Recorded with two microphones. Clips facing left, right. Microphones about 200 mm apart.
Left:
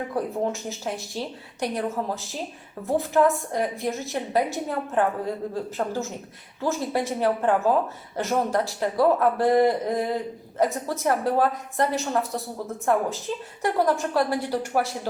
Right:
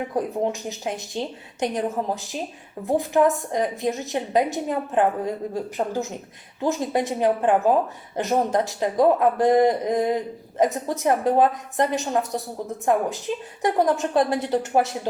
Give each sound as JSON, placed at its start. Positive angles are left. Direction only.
{"t": 0.2, "sound": "a woman's voice", "side_deg": -15}